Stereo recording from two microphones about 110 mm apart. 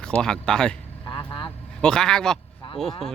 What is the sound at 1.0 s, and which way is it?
Vehicle, 45° left (ahead or behind).